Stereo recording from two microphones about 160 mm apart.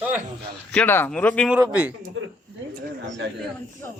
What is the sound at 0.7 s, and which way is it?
Speech, 10° left (ahead or behind).